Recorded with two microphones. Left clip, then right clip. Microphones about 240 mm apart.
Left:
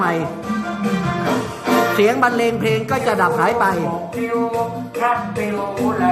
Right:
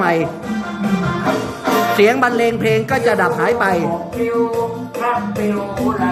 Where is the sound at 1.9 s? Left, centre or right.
Centre.